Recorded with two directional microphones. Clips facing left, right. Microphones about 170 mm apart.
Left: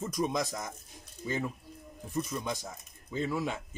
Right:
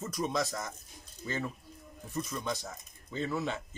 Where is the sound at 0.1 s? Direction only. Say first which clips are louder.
Even; 15° left (ahead or behind).